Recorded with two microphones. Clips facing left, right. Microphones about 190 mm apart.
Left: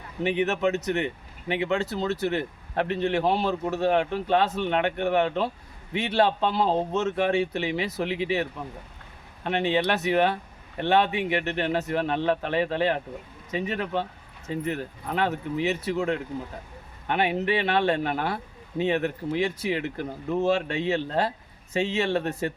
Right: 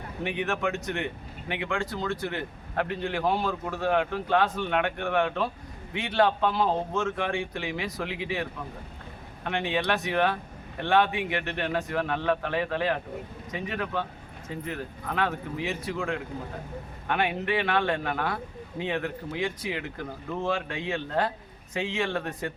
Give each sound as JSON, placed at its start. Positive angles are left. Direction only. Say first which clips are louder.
{"t": 0.4, "sound": "speech", "louder": "left 4 dB", "side_deg": 20}
{"t": 17.1, "sound": "speech", "louder": "left 3 dB", "side_deg": 25}